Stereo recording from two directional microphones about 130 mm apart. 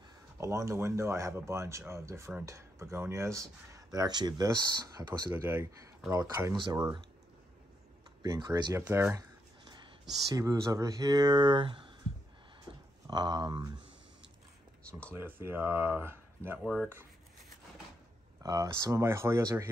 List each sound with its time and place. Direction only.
0.4 s speech: 20° right (ahead or behind)
6.1 s speech: 30° right (ahead or behind)
8.2 s speech: 30° right (ahead or behind)
13.0 s speech: 35° right (ahead or behind)
14.9 s speech: 10° left (ahead or behind)
15.1 s speech: 15° right (ahead or behind)
16.5 s speech: 5° right (ahead or behind)
18.4 s speech: 30° right (ahead or behind)